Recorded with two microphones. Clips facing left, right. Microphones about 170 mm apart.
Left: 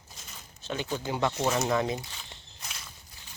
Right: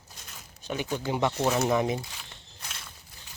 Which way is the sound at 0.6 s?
15° right (ahead or behind).